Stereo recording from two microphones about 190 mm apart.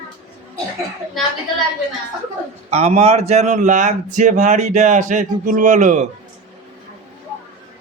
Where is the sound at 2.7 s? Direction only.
35° right (ahead or behind).